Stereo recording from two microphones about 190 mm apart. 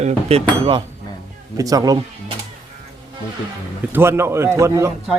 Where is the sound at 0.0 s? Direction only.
30° right (ahead or behind).